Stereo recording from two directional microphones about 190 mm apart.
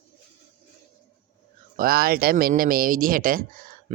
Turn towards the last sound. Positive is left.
turn(degrees=-45)  # may be behind; listen again after turning